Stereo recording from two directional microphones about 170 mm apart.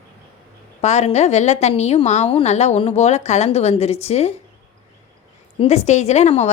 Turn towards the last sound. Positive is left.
turn(degrees=40)  # may be behind; listen again after turning